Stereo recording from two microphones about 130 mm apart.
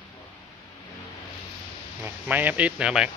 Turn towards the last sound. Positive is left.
turn(degrees=-5)  # may be behind; listen again after turning